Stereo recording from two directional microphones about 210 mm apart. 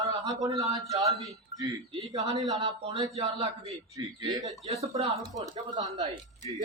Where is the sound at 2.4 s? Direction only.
20° right (ahead or behind).